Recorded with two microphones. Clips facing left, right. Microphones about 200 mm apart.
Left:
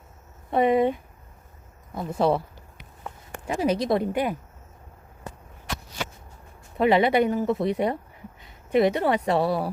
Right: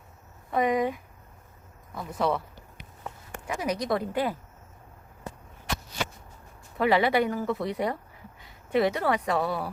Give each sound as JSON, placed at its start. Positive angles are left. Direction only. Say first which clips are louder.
{"t": 0.5, "sound": "speech", "louder": "left 5 dB", "side_deg": 30}
{"t": 2.0, "sound": "speech", "louder": "left 5 dB", "side_deg": 30}
{"t": 3.4, "sound": "speech", "louder": "left 6 dB", "side_deg": 30}
{"t": 6.7, "sound": "speech", "louder": "left 3 dB", "side_deg": 20}